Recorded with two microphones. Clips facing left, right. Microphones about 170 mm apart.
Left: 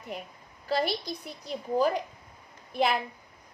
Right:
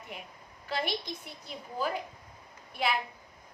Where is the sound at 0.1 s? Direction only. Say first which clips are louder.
Left 8 dB; 40° left (ahead or behind).